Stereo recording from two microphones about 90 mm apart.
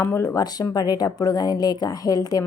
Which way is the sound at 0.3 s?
45° left (ahead or behind).